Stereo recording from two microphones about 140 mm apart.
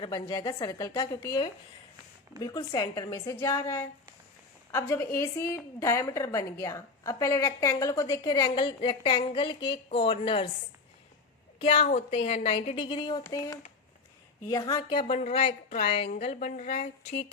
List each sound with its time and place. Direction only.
0.0 s a woman's voice: 30° left (ahead or behind)
11.6 s a woman's voice: 45° left (ahead or behind)
13.2 s a woman's voice: 25° left (ahead or behind); by 17.2 s 50° left (ahead or behind)